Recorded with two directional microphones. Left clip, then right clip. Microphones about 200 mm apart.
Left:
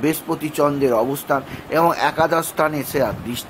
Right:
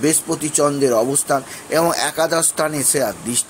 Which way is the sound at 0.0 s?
5° right (ahead or behind).